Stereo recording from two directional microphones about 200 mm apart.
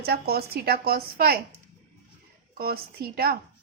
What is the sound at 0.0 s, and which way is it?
A woman's voice, 50° right (ahead or behind).